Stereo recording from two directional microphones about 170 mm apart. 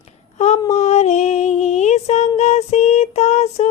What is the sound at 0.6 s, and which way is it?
Female singing, 40° left (ahead or behind).